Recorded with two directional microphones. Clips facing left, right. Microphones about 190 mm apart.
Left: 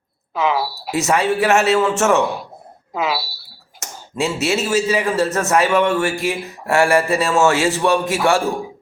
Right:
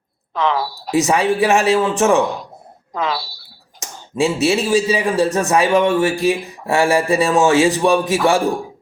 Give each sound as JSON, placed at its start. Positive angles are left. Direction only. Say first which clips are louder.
{"t": 0.3, "sound": "speech", "louder": "even", "side_deg": 5}
{"t": 0.9, "sound": "speech", "louder": "right 2 dB", "side_deg": -15}
{"t": 2.9, "sound": "speech", "louder": "even", "side_deg": 5}
{"t": 4.1, "sound": "speech", "louder": "right 4 dB", "side_deg": -15}